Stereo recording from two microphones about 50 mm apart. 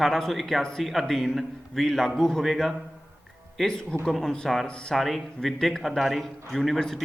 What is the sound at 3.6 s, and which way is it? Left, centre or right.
Speech, centre.